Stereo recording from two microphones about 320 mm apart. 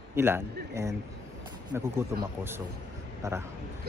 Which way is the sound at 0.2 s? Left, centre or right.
Centre.